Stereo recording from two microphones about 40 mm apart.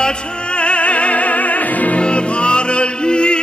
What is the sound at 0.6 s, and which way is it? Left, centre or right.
Opera, left.